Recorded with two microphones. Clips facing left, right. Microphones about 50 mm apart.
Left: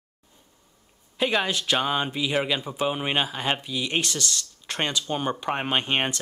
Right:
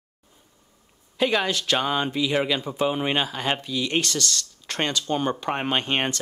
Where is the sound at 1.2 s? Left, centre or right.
Centre.